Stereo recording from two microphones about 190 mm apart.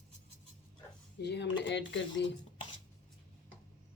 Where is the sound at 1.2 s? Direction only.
65° left (ahead or behind).